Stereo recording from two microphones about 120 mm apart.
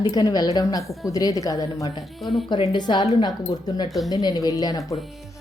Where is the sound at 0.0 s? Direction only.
35° left (ahead or behind).